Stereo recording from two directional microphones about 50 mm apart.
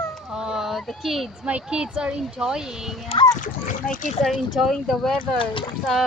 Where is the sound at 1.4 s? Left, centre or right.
Centre.